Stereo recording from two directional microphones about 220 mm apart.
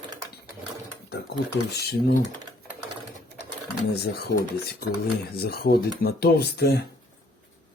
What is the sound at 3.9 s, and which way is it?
Speech, 45° left (ahead or behind).